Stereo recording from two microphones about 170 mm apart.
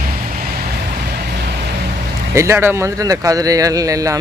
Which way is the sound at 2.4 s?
15° right (ahead or behind).